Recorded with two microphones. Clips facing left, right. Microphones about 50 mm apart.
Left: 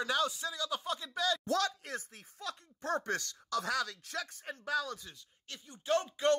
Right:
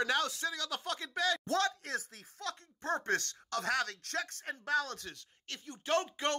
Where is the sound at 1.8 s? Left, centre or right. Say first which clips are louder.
Right 3 dB; right.